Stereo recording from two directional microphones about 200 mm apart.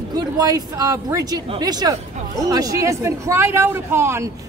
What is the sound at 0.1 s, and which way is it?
Speech, 20° right (ahead or behind).